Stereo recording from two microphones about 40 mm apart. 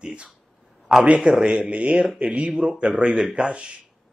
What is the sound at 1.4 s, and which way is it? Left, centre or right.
Speech, right.